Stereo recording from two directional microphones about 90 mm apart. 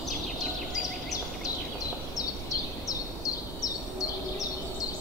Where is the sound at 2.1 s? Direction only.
40° left (ahead or behind).